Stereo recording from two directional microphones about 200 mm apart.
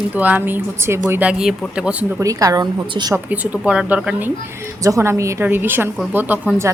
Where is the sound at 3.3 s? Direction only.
5° right (ahead or behind).